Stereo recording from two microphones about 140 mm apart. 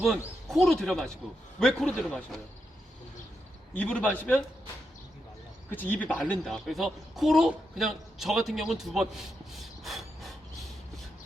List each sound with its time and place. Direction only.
0.5 s a man's voice: centre (ahead or behind)
3.8 s a man's voice: 10° left (ahead or behind)
5.7 s a man's voice: 15° left (ahead or behind)